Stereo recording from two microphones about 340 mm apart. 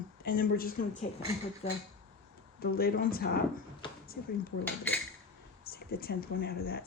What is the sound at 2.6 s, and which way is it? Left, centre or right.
Speech, left.